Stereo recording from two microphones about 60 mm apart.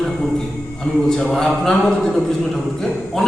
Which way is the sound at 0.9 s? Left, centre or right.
Centre.